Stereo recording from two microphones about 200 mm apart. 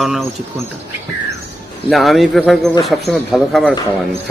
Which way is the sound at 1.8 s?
Centre (ahead or behind).